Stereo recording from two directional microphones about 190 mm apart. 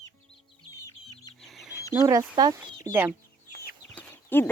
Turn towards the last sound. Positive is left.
turn(degrees=10)  # may be behind; listen again after turning